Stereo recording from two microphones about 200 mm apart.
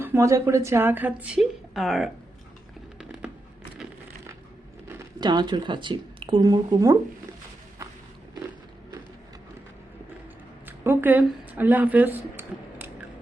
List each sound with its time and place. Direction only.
0.0 s a woman's voice: 15° right (ahead or behind)
3.0 s music: 5° right (ahead or behind)
4.9 s speech: 15° right (ahead or behind)
10.7 s speech: 10° right (ahead or behind)